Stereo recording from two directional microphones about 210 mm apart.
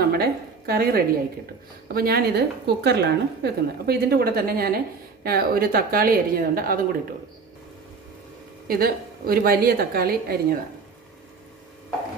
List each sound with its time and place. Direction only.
0.1 s a woman's voice: 45° right (ahead or behind)
8.6 s a woman's voice: 45° right (ahead or behind)